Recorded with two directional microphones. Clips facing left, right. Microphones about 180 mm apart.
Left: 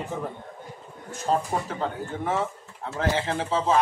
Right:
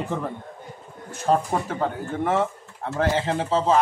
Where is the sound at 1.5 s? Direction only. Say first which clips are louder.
Right 3 dB; 50° right (ahead or behind).